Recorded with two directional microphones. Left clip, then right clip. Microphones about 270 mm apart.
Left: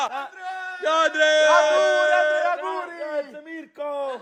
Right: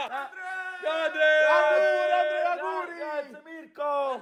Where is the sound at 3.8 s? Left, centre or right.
Centre.